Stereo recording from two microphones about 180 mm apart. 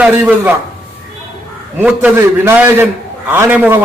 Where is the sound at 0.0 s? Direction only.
10° right (ahead or behind).